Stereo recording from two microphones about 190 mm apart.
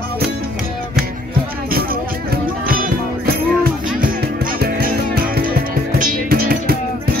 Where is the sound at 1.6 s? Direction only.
50° right (ahead or behind).